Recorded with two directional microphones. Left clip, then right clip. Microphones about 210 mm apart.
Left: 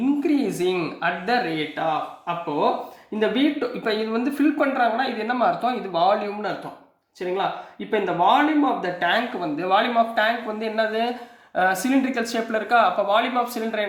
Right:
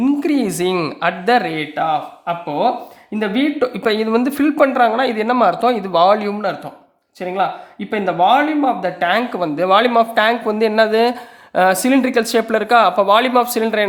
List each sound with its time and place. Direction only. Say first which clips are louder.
0.2 s speech: right 5 dB; 45° right (ahead or behind)
3.2 s speech: right 4 dB; 45° right (ahead or behind)
7.9 s speech: right 5 dB; 45° right (ahead or behind)